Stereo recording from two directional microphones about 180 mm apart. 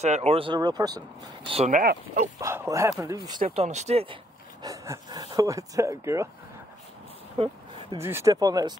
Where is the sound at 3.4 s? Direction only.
40° right (ahead or behind).